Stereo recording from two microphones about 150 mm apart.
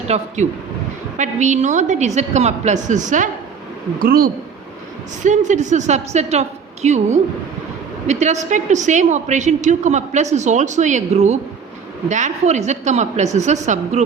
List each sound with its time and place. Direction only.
0.1 s a woman's voice: 45° right (ahead or behind)
4.0 s speech: 80° right
5.2 s a woman's voice: 55° right (ahead or behind)